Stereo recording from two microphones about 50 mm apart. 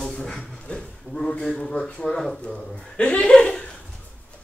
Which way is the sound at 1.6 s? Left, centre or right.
Centre.